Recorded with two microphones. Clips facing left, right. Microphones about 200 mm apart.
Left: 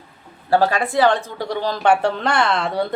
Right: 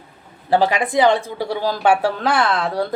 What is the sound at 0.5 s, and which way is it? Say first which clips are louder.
A woman's voice: right 1 dB; 15° right (ahead or behind).